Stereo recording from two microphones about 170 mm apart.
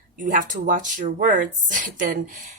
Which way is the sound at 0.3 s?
50° right (ahead or behind).